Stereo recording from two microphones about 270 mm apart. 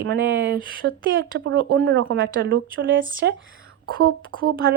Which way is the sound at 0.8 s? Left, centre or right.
Right.